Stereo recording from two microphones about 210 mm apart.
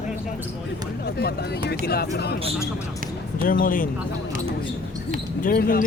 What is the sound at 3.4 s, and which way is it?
Speech, 40° left (ahead or behind).